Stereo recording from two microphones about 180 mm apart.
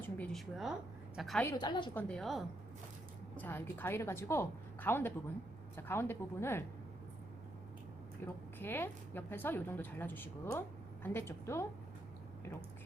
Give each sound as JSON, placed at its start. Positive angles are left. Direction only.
{"t": 0.0, "sound": "a sound", "side_deg": 5}
{"t": 1.1, "sound": "a woman's voice", "side_deg": 0}
{"t": 1.5, "sound": "a woman's voice", "side_deg": 25}
{"t": 2.0, "sound": "a woman's voice", "side_deg": 5}
{"t": 8.2, "sound": "a woman's voice", "side_deg": 10}